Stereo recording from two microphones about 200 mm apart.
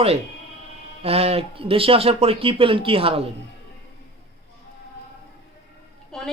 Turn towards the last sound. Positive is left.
turn(degrees=0)  # may be behind; listen again after turning